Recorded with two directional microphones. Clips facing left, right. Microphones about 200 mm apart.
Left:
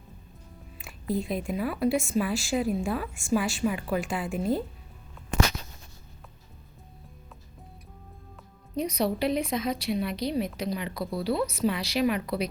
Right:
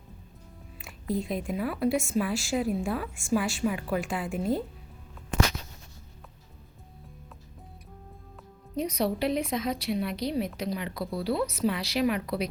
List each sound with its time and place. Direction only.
1.0 s a woman's voice: 5° left (ahead or behind)
8.7 s a woman's voice: centre (ahead or behind)